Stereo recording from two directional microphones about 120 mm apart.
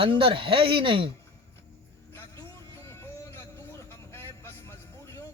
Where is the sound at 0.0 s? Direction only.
45° right (ahead or behind).